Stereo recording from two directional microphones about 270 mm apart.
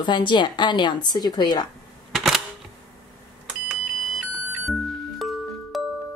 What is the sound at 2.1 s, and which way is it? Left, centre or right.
Camera, centre.